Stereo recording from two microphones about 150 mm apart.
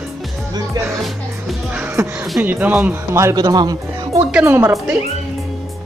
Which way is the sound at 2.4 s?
10° right (ahead or behind).